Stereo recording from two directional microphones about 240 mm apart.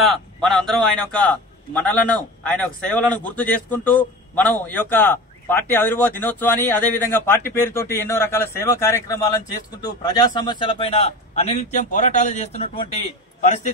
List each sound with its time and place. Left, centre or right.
0.0 s a man's voice: centre; by 12.8 s left